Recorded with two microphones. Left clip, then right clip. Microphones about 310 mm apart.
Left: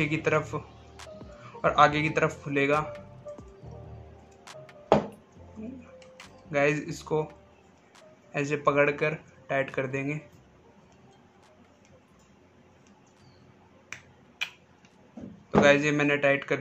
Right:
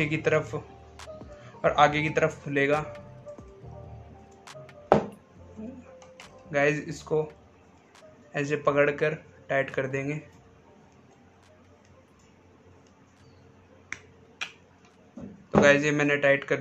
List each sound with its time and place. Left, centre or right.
0.0 s speech: centre
4.5 s a sound: centre
6.1 s speech: centre
15.6 s speech: centre